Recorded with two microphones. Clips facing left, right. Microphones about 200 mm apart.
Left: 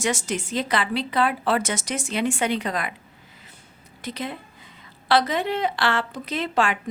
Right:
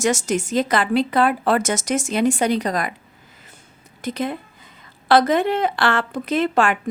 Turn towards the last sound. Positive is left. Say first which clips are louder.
# right 5 dB
turn(degrees=-50)  # may be behind; listen again after turning